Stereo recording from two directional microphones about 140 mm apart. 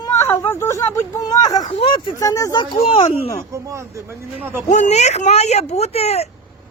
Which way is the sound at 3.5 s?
20° right (ahead or behind).